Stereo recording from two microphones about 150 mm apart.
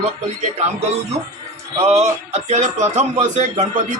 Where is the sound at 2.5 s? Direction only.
50° right (ahead or behind).